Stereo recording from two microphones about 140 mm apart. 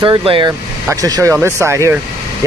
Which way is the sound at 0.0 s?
35° right (ahead or behind).